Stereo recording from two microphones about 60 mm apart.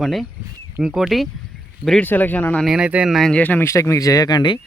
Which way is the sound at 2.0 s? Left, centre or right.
Left.